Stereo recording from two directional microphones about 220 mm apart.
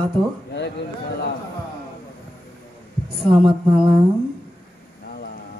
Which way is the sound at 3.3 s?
25° right (ahead or behind).